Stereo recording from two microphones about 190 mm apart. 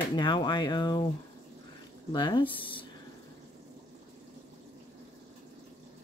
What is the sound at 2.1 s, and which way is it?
Speech, 20° left (ahead or behind).